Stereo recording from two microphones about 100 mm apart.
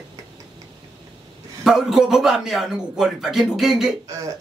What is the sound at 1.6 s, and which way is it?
A man's voice, 5° right (ahead or behind).